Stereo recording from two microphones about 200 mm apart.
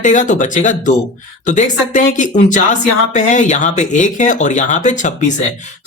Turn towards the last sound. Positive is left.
turn(degrees=40)  # may be behind; listen again after turning